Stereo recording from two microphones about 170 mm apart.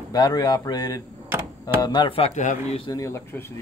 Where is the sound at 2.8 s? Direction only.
20° left (ahead or behind).